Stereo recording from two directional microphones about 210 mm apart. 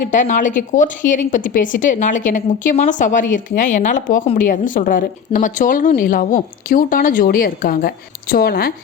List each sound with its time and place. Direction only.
0.0 s a woman's voice: 35° left (ahead or behind)